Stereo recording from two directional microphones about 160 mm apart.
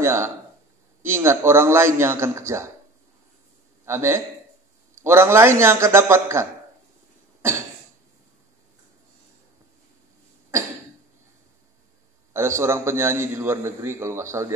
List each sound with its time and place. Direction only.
0.0 s a man's voice: 15° right (ahead or behind)
3.8 s a man's voice: 15° right (ahead or behind)
12.3 s a man's voice: 15° right (ahead or behind)